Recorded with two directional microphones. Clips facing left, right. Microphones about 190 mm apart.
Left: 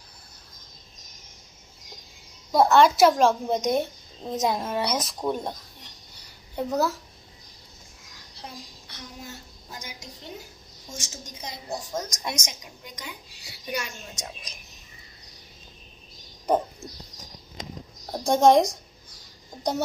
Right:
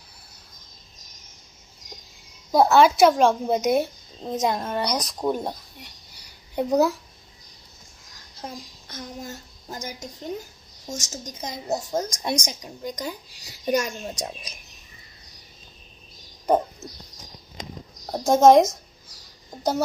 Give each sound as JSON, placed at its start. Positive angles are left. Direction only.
{"t": 2.5, "sound": "a woman's voice", "side_deg": -5}
{"t": 8.4, "sound": "a child's voice", "side_deg": -45}
{"t": 12.0, "sound": "a child's voice", "side_deg": -30}
{"t": 18.1, "sound": "a woman's voice", "side_deg": 0}